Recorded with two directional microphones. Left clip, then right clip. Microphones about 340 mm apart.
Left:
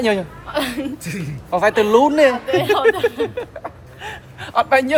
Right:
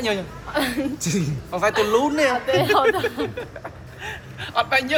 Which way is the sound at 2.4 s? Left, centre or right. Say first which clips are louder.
Left 1 dB; centre.